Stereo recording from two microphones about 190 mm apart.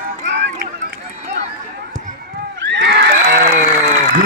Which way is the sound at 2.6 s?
70° right (ahead or behind).